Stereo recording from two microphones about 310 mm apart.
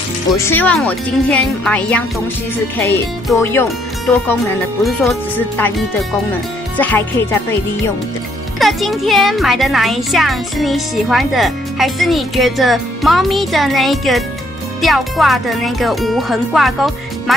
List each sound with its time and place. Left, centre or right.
0.3 s speech: centre
6.8 s speech: centre
8.5 s speech: centre